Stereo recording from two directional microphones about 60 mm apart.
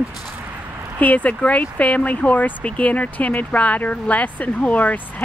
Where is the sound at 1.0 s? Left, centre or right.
Left.